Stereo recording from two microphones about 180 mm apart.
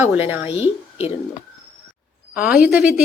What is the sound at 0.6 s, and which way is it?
Speech, 35° left (ahead or behind).